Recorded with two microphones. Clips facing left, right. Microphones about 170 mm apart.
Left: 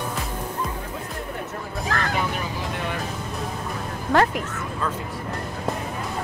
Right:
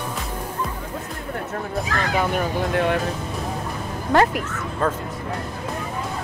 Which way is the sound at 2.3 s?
55° right (ahead or behind).